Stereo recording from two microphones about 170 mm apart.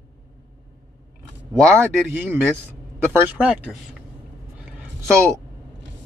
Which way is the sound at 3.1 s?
10° right (ahead or behind).